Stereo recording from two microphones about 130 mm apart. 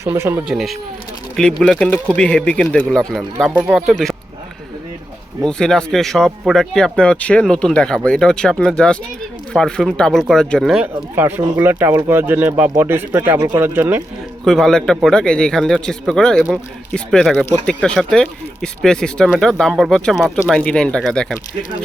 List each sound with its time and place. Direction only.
0.0 s speech: 20° right (ahead or behind)
0.4 s speech: centre (ahead or behind)
5.4 s speech: 5° left (ahead or behind)
10.8 s speech: 15° right (ahead or behind)
14.4 s speech: 5° left (ahead or behind)